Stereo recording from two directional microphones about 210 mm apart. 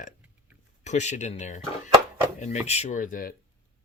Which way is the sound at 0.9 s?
35° left (ahead or behind).